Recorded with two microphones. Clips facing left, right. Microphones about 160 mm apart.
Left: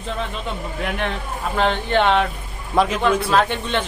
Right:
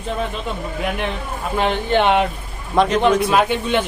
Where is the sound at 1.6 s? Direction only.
10° right (ahead or behind).